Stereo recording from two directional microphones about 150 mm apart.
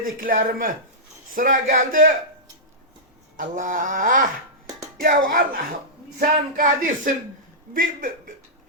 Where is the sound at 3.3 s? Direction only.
60° right (ahead or behind).